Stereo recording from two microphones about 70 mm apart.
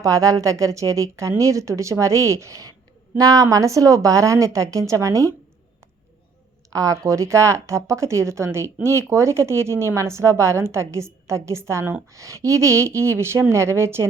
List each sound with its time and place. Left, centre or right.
0.0 s speech: right
6.7 s speech: right